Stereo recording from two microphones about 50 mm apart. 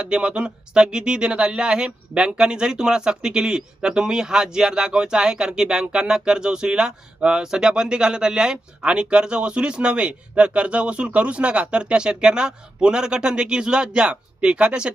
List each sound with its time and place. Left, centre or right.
0.0 s speech: centre